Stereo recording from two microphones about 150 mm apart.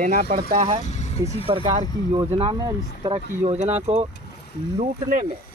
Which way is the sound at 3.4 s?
45° right (ahead or behind).